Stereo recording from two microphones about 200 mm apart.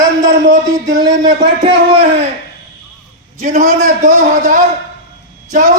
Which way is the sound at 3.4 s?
35° right (ahead or behind).